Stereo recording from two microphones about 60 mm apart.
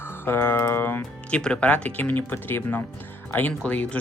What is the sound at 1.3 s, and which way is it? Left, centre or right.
Speech, centre.